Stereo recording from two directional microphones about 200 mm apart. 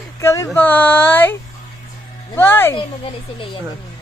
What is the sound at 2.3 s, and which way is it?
Speech, 10° left (ahead or behind).